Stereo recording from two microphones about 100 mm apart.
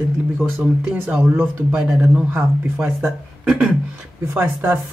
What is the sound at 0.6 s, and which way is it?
A woman's voice, 15° right (ahead or behind).